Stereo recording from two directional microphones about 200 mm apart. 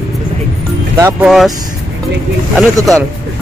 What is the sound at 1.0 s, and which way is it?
Speech, 10° right (ahead or behind).